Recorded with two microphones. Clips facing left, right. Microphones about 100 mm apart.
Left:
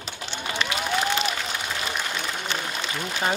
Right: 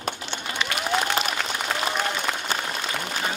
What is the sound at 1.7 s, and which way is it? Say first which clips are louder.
Applause: right 4 dB; 65° right (ahead or behind).